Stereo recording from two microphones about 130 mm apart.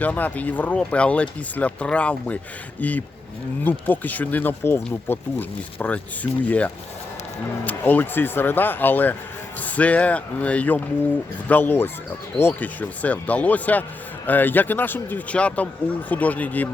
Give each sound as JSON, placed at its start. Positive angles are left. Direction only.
{"t": 0.0, "sound": "a man's voice", "side_deg": 10}
{"t": 7.6, "sound": "a man's voice", "side_deg": 15}